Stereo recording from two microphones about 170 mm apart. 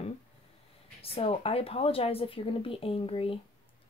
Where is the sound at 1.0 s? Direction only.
35° left (ahead or behind).